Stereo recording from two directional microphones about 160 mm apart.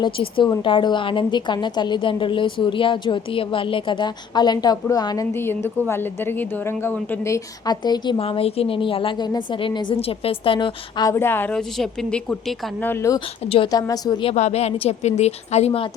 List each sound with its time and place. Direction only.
0.0 s a woman's voice: 30° left (ahead or behind)
11.1 s a woman's voice: 15° left (ahead or behind)
12.8 s a woman's voice: 15° left (ahead or behind)
13.1 s a woman's voice: 35° left (ahead or behind)
13.7 s a woman's voice: 25° left (ahead or behind)
14.3 s a woman's voice: 45° left (ahead or behind)